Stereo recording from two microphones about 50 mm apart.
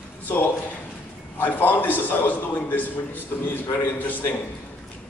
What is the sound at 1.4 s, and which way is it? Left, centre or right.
A man's voice, left.